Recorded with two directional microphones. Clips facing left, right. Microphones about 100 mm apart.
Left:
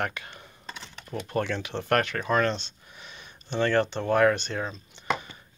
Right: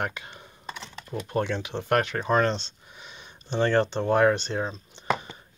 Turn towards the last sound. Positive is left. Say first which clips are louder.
# right 3 dB
turn(degrees=-25)  # may be behind; listen again after turning